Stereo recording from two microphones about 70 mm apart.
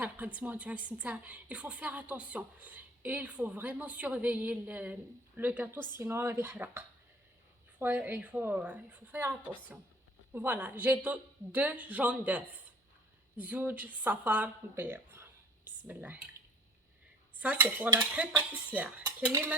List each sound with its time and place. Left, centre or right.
0.3 s a woman's voice: right
17.3 s a woman's voice: right